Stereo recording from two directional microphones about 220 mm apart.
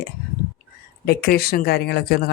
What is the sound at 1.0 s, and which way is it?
Speech, 45° left (ahead or behind).